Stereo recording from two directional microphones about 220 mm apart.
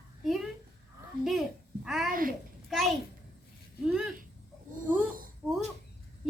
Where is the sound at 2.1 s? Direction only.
40° right (ahead or behind).